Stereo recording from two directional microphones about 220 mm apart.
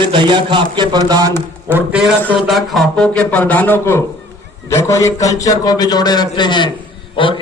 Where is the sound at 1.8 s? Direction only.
5° right (ahead or behind).